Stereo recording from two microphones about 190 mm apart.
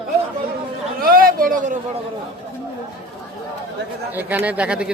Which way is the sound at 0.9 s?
50° right (ahead or behind).